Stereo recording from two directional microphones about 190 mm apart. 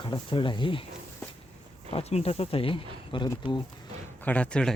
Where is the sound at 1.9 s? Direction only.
35° left (ahead or behind).